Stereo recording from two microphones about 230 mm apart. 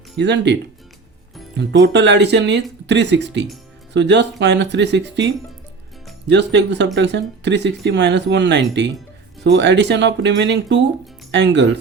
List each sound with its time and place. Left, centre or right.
0.2 s speech: right
1.5 s speech: right